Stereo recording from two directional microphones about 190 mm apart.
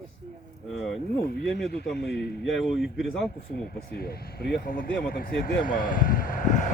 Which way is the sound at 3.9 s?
55° left (ahead or behind).